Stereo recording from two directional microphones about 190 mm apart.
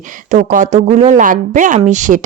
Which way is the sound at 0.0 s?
45° right (ahead or behind).